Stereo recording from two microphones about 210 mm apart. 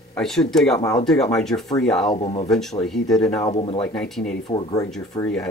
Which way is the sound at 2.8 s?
5° left (ahead or behind).